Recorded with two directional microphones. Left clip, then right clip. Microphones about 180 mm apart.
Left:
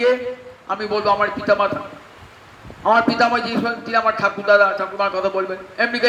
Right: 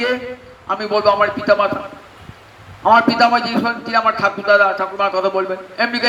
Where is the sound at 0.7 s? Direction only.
25° right (ahead or behind).